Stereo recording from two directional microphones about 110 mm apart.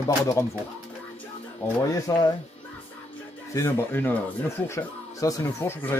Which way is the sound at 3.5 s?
25° left (ahead or behind).